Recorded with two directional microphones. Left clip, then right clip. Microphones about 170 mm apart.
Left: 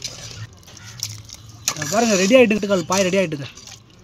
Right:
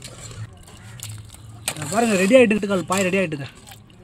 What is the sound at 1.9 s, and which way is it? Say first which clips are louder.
Speech: left 1 dB; 15° left (ahead or behind).